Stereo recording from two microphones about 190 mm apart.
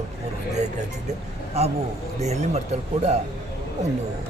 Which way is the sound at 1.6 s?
35° right (ahead or behind).